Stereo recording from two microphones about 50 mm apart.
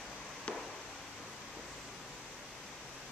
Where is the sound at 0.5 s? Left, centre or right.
Left.